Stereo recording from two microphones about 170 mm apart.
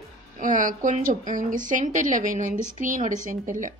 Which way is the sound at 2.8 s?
50° right (ahead or behind).